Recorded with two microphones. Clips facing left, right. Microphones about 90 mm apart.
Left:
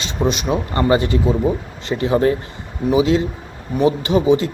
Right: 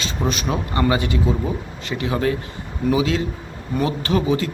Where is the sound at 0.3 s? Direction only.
20° left (ahead or behind).